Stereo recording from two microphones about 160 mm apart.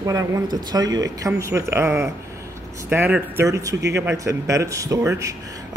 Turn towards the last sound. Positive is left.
turn(degrees=-20)  # may be behind; listen again after turning